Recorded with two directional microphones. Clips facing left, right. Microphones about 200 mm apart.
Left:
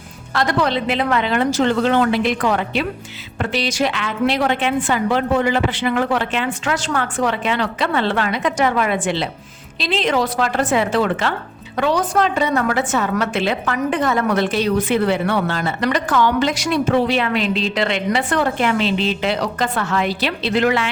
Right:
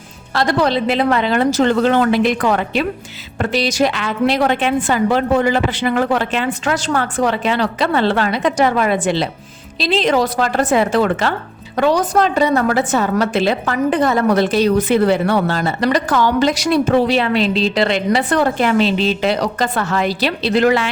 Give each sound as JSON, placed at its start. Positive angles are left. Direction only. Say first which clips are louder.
{"t": 0.3, "sound": "a woman's voice", "louder": "right 3 dB", "side_deg": -35}